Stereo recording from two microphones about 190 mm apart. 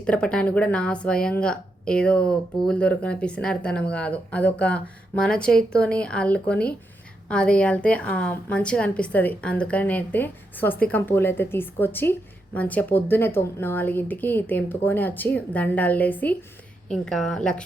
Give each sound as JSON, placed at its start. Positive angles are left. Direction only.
{"t": 0.0, "sound": "a woman's voice", "side_deg": 5}